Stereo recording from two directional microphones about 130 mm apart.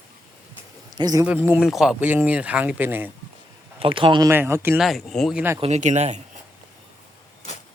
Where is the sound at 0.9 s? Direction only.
30° right (ahead or behind).